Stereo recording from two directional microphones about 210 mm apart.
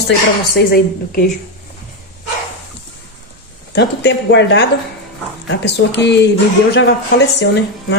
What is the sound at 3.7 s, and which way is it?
A woman's voice, 55° left (ahead or behind).